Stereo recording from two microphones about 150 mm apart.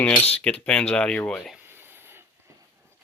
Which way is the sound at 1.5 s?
15° right (ahead or behind).